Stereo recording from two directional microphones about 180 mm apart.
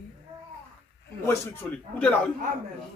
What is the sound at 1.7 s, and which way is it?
Speech, 10° left (ahead or behind).